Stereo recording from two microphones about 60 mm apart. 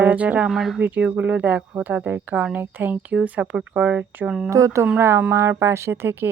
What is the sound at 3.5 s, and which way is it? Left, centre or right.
Speech, centre.